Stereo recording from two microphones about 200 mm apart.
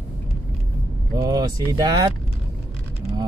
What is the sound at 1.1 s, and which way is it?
Speech, 20° right (ahead or behind).